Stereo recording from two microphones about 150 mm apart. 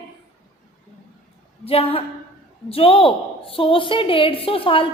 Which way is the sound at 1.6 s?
40° left (ahead or behind).